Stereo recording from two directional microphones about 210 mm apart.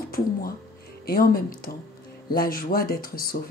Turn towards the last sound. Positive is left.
turn(degrees=45)  # may be behind; listen again after turning